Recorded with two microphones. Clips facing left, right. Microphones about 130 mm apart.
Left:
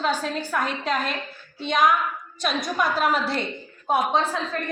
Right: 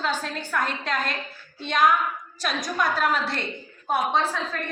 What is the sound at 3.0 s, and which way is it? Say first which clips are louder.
Speech: left 2 dB; 10° left (ahead or behind).